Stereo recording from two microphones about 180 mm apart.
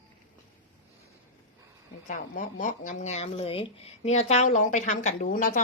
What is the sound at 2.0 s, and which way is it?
Speech, 45° left (ahead or behind).